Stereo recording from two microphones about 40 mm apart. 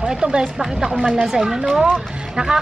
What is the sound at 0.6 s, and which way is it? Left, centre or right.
A woman's voice, centre.